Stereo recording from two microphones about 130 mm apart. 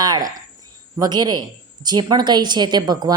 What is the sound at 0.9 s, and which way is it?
A woman's voice, 30° right (ahead or behind).